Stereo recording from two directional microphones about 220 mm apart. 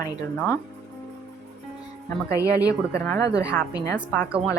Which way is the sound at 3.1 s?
15° left (ahead or behind).